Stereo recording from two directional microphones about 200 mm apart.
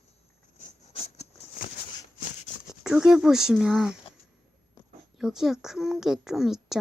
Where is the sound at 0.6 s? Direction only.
30° left (ahead or behind).